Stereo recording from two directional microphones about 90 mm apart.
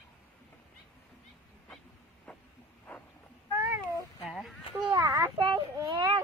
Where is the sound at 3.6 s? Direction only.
25° right (ahead or behind).